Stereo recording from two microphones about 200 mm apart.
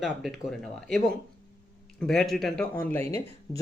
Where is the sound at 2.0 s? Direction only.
Centre (ahead or behind); by 3.6 s 15° left (ahead or behind).